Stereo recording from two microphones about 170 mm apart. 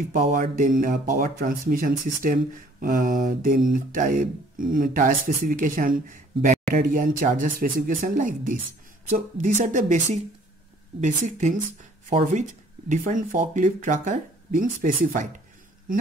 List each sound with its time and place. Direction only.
0.1 s speech: 50° right (ahead or behind)